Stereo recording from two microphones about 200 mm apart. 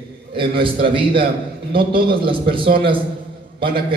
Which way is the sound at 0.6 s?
25° right (ahead or behind).